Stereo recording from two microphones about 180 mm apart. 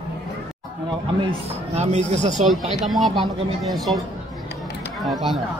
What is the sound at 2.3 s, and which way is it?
Speech, centre (ahead or behind).